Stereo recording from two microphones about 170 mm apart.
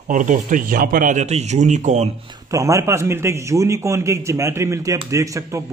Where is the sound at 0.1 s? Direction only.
50° right (ahead or behind).